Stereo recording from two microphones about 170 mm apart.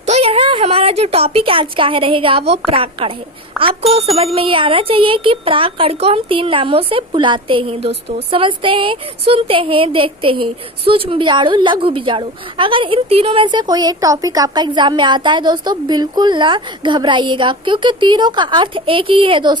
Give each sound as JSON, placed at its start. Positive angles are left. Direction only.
{"t": 0.0, "sound": "a woman's voice", "side_deg": -40}
{"t": 3.6, "sound": "a child's voice", "side_deg": 0}
{"t": 3.9, "sound": "speech", "side_deg": -35}